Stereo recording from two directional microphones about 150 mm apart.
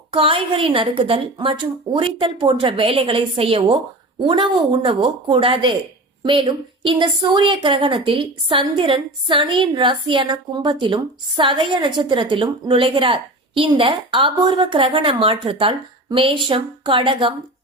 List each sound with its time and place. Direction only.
0.1 s a woman's voice: 35° right (ahead or behind)